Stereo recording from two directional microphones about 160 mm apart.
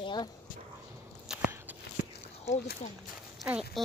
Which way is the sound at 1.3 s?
10° right (ahead or behind).